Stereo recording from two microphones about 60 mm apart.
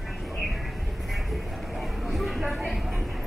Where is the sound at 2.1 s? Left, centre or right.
Centre.